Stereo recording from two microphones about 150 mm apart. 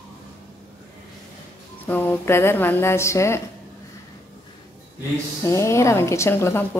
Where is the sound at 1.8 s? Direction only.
10° left (ahead or behind).